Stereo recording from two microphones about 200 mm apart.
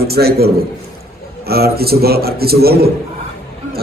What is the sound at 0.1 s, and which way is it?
A man's voice, 50° right (ahead or behind).